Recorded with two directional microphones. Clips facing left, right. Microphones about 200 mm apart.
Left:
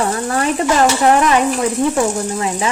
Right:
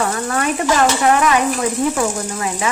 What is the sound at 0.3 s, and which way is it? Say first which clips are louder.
Stir: left 2 dB; 30° left (ahead or behind).